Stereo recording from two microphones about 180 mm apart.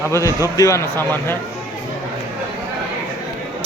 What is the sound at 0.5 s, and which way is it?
Speech, 15° left (ahead or behind).